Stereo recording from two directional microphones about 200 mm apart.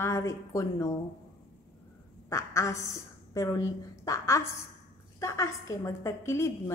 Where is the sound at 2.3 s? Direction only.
15° left (ahead or behind).